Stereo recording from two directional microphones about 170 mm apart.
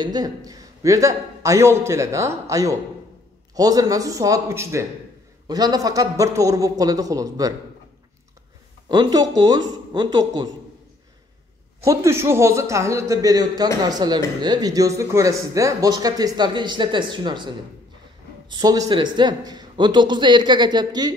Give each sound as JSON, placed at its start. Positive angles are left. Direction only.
{"t": 0.0, "sound": "speech", "side_deg": -25}
{"t": 8.8, "sound": "speech", "side_deg": -25}
{"t": 11.8, "sound": "a man's voice", "side_deg": -15}